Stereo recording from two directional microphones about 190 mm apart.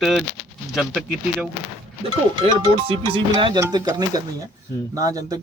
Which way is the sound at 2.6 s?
30° right (ahead or behind).